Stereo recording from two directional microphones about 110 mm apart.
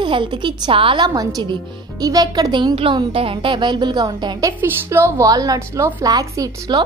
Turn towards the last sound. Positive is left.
turn(degrees=-35)  # may be behind; listen again after turning